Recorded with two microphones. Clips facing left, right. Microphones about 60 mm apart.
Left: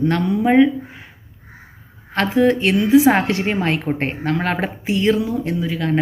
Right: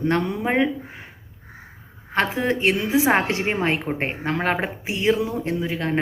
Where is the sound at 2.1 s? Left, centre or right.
Centre.